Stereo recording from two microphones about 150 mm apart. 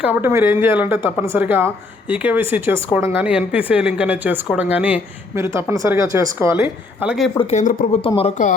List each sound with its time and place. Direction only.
0.0 s speech: 15° right (ahead or behind)
6.6 s speech: 10° right (ahead or behind)
7.5 s speech: 65° left (ahead or behind)
8.0 s speech: 35° left (ahead or behind)